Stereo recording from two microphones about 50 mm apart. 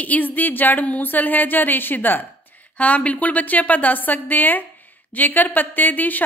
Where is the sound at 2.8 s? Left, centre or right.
Left.